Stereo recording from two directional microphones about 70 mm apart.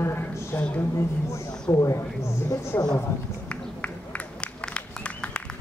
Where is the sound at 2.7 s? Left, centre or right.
Left.